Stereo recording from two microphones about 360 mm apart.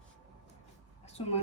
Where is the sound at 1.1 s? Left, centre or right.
Centre.